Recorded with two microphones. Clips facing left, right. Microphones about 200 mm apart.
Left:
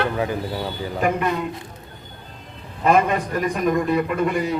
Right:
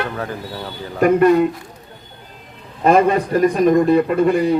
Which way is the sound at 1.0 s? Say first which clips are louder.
Right 10 dB; 45° right (ahead or behind).